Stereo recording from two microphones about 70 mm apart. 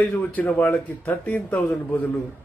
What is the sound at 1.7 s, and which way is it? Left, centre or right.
Speech, left.